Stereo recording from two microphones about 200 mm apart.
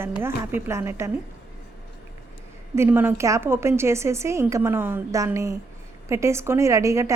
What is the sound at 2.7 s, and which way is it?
Speech, 10° right (ahead or behind).